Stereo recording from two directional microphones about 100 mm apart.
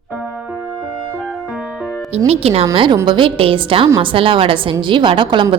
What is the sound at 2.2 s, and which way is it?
Speech, 80° right.